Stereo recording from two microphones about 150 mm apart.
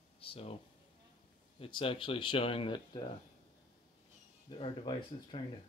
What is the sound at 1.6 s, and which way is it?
Speech, 35° left (ahead or behind).